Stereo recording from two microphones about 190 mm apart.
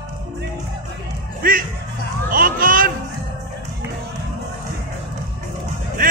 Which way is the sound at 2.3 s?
50° right (ahead or behind).